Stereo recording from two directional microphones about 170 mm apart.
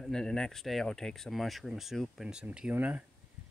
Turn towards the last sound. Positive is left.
turn(degrees=-10)  # may be behind; listen again after turning